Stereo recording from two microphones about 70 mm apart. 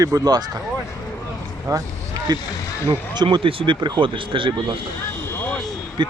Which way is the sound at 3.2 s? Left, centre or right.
Right.